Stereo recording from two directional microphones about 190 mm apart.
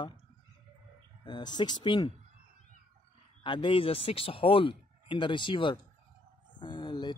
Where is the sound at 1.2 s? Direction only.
25° left (ahead or behind).